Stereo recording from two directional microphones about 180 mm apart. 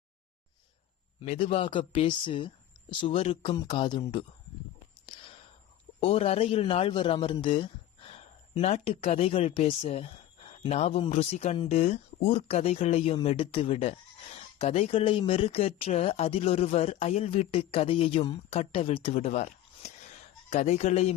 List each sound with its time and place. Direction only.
1.2 s speech: 35° left (ahead or behind)
5.0 s whispering: 30° left (ahead or behind)
6.0 s speech: 35° left (ahead or behind)